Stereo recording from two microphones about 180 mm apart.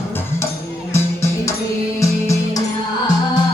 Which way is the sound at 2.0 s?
15° left (ahead or behind).